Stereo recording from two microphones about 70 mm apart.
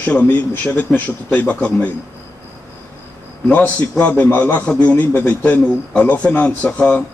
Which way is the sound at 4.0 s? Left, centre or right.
Left.